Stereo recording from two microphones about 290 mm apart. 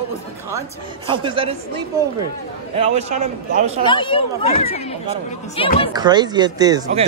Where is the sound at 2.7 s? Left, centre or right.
Right.